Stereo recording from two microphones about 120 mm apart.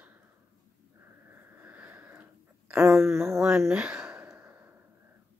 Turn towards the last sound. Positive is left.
turn(degrees=-20)  # may be behind; listen again after turning